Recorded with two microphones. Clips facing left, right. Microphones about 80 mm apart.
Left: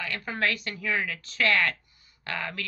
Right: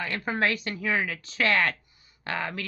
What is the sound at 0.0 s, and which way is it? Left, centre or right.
Speech, right.